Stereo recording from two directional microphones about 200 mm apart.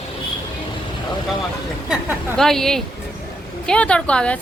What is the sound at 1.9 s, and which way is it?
A woman's voice, centre (ahead or behind).